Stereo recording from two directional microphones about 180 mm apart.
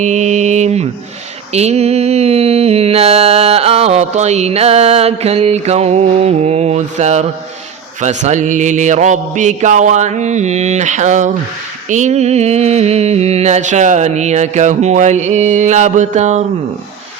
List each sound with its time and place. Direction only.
0.0 s mantra: 40° right (ahead or behind)